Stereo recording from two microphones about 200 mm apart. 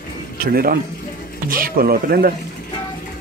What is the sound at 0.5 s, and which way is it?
Speech, 50° right (ahead or behind).